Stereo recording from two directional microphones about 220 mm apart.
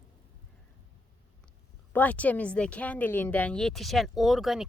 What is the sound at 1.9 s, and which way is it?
Speech, 5° left (ahead or behind).